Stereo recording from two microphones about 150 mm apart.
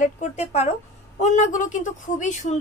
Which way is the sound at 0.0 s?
50° left (ahead or behind).